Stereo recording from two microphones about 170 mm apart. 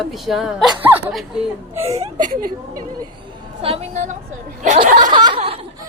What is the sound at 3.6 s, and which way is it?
Speech, 40° right (ahead or behind).